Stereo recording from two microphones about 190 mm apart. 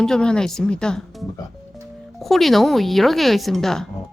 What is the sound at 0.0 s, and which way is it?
A woman's voice, 5° left (ahead or behind).